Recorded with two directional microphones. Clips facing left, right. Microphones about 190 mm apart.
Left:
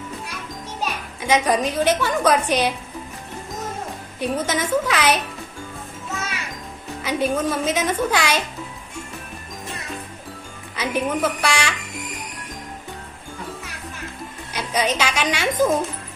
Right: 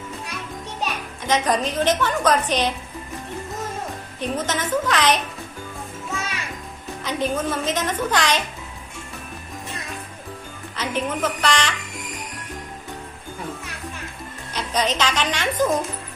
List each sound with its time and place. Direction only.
1.2 s a woman's voice: 10° left (ahead or behind)
4.2 s a woman's voice: 10° left (ahead or behind)
7.0 s a woman's voice: 10° left (ahead or behind)
10.8 s a woman's voice: 10° left (ahead or behind)
14.5 s a woman's voice: 10° left (ahead or behind)